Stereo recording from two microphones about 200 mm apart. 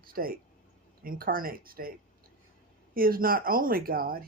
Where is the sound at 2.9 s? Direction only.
45° right (ahead or behind).